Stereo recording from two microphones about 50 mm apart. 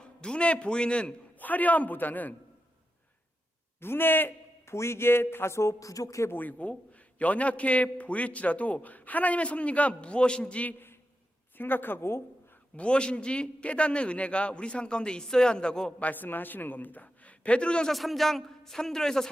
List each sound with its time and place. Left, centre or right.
0.0 s a man's voice: centre
1.4 s a man's voice: left
3.8 s a woman's voice: left
4.6 s speech: left
6.3 s a man's voice: left
11.5 s a woman's voice: left
12.7 s a man's voice: left
16.0 s a man's voice: left; by 17.9 s centre
17.9 s a man's voice: centre